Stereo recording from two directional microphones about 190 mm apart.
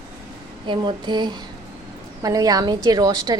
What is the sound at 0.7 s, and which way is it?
A woman's voice, 25° right (ahead or behind).